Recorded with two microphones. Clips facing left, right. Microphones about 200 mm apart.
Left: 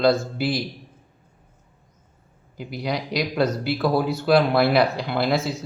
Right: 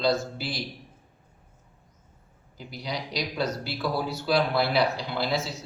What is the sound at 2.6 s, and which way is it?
Speech, 60° left (ahead or behind).